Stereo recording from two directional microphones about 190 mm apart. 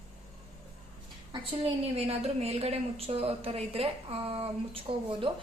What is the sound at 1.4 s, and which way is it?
A woman's voice, 30° right (ahead or behind).